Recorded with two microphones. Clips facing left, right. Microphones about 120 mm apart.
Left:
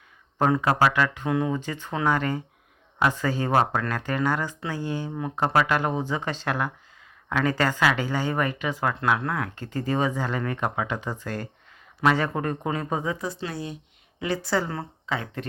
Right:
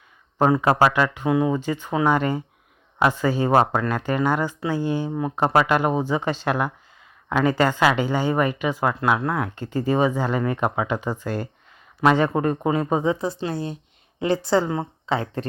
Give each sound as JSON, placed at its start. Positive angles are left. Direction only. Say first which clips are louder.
{"t": 0.6, "sound": "speech", "louder": "right 3 dB", "side_deg": -25}